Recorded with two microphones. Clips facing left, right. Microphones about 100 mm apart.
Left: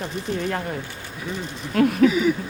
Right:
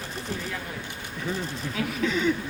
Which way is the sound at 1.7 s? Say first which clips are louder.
Left 13 dB; 55° left (ahead or behind).